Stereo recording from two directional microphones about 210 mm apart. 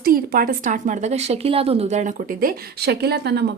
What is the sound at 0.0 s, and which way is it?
Speech, 45° right (ahead or behind).